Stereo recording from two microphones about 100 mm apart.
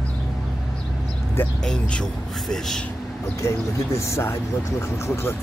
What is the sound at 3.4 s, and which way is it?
Speech, 30° left (ahead or behind).